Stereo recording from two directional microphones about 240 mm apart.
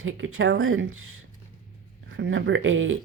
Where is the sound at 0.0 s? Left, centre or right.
Right.